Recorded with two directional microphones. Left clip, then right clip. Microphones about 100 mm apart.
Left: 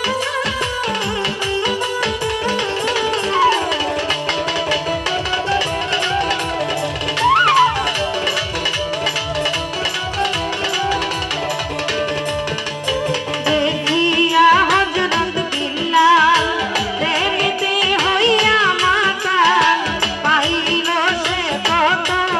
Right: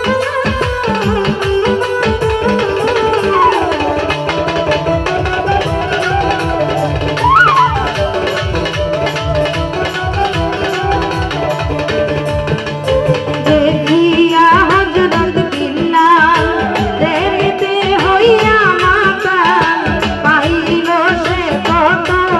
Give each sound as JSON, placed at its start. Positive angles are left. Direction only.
{"t": 7.2, "sound": "music", "side_deg": 10}
{"t": 13.5, "sound": "music", "side_deg": 15}